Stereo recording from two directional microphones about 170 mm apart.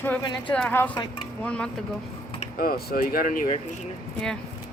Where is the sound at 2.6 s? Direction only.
65° left (ahead or behind).